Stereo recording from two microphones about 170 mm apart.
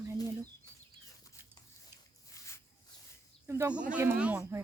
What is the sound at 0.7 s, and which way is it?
Chicken, 25° left (ahead or behind).